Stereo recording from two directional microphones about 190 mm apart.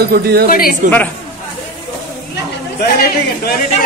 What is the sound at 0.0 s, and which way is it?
Speech, 55° right (ahead or behind).